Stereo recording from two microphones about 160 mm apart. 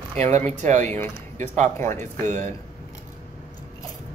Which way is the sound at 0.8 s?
15° left (ahead or behind).